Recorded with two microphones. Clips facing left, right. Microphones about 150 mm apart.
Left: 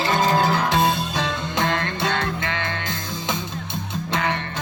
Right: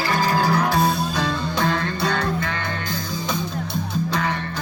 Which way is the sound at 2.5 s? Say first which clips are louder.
Even; 80° left.